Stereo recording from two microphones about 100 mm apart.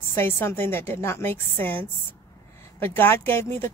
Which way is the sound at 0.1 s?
25° left (ahead or behind).